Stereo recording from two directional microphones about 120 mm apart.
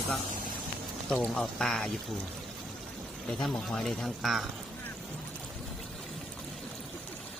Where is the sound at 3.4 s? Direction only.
Centre (ahead or behind).